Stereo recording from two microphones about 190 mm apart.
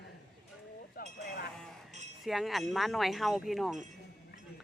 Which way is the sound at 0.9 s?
50° left (ahead or behind).